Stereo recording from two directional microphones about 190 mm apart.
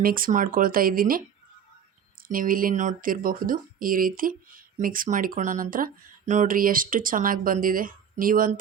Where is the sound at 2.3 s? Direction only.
50° right (ahead or behind).